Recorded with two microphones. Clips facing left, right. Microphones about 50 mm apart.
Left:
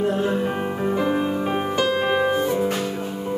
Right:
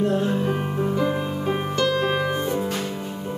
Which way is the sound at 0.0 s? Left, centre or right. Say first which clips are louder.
Even; centre.